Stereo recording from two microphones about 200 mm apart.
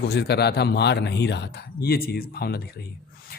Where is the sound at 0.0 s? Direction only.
55° left (ahead or behind).